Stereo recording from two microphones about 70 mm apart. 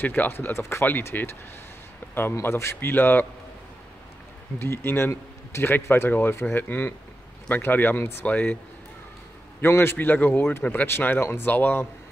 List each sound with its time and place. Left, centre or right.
0.0 s speech: left
1.1 s a man's voice: left
2.9 s a man's voice: left
4.6 s a man's voice: left
9.6 s a man's voice: left
10.9 s speech: left